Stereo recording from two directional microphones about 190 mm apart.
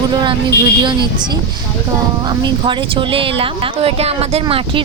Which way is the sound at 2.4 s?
25° right (ahead or behind).